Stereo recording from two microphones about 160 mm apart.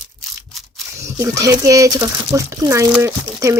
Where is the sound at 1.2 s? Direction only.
20° right (ahead or behind).